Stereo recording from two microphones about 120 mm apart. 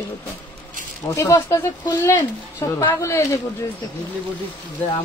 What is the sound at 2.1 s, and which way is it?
Speech, 20° left (ahead or behind).